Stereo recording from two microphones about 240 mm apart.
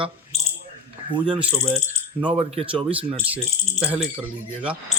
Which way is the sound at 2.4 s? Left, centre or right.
Right.